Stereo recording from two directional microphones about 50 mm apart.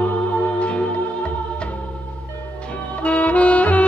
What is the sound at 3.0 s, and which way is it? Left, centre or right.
Music, left.